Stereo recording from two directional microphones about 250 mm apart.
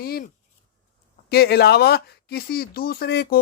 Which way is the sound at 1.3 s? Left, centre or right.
Left.